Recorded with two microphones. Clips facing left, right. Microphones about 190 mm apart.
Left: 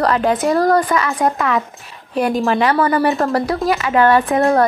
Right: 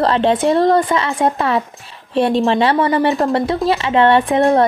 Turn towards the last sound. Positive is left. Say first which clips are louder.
# right 1 dB
turn(degrees=-25)  # may be behind; listen again after turning